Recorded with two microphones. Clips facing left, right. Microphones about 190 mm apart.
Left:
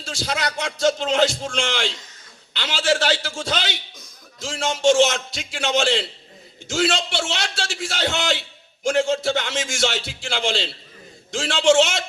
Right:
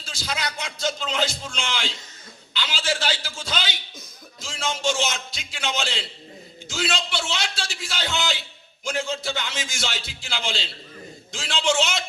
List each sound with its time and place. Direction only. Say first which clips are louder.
0.0 s music: left 8 dB; 75° left (ahead or behind)
0.3 s a man's voice: left 5 dB; 75° left (ahead or behind)
7.2 s a man's voice: left 3 dB; 75° left (ahead or behind)